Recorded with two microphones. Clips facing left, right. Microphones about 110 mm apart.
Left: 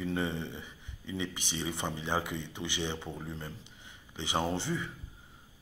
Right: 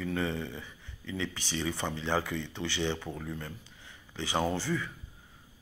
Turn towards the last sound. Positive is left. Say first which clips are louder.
# right 2 dB
turn(degrees=20)  # may be behind; listen again after turning